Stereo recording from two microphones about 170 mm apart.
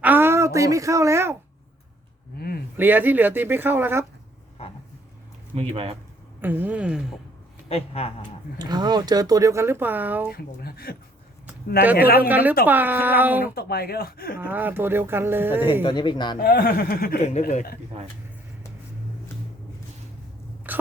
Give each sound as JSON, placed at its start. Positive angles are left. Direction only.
{"t": 0.0, "sound": "speech", "side_deg": -10}
{"t": 2.7, "sound": "speech", "side_deg": -10}
{"t": 5.5, "sound": "speech", "side_deg": -35}
{"t": 6.4, "sound": "speech", "side_deg": -10}
{"t": 7.7, "sound": "speech", "side_deg": 35}
{"t": 8.5, "sound": "speech", "side_deg": -25}
{"t": 10.3, "sound": "speech", "side_deg": 65}
{"t": 11.9, "sound": "speech", "side_deg": 60}
{"t": 12.3, "sound": "speech", "side_deg": -10}
{"t": 13.6, "sound": "speech", "side_deg": 65}
{"t": 14.5, "sound": "speech", "side_deg": -10}
{"t": 15.8, "sound": "speech", "side_deg": 30}
{"t": 16.4, "sound": "speech", "side_deg": 65}
{"t": 20.7, "sound": "whispering", "side_deg": -10}